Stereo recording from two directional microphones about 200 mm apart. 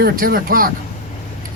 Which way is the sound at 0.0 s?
50° right (ahead or behind).